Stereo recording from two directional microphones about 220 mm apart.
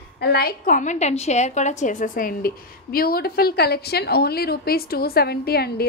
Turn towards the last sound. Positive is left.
turn(degrees=45)  # may be behind; listen again after turning